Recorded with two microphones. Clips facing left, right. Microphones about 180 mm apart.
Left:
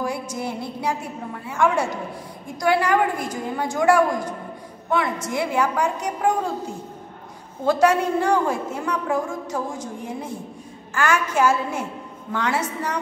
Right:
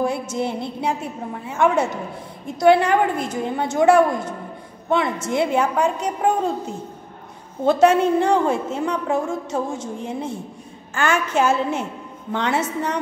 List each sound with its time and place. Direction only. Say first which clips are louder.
0.0 s a woman's voice: right 4 dB; 25° right (ahead or behind)
7.6 s a woman's voice: right 3 dB; 25° right (ahead or behind)